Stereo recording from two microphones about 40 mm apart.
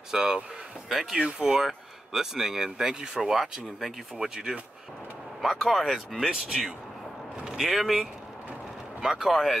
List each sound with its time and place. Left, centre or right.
0.1 s speech: centre
9.2 s speech: centre